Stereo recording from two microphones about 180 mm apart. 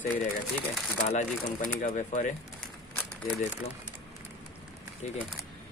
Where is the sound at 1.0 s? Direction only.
40° left (ahead or behind).